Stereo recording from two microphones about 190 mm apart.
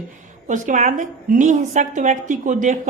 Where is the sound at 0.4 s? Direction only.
40° right (ahead or behind).